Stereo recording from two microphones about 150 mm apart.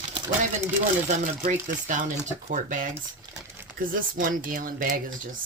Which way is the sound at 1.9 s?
55° right (ahead or behind).